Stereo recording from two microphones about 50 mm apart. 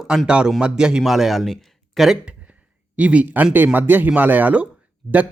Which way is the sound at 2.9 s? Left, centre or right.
Right.